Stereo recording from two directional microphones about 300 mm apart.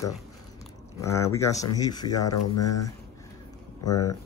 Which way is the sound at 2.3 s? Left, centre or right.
Left.